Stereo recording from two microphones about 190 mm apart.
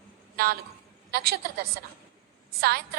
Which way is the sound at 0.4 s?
55° right (ahead or behind).